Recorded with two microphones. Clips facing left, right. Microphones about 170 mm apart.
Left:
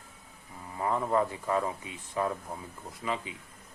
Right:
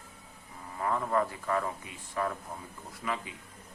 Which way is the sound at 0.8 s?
20° left (ahead or behind).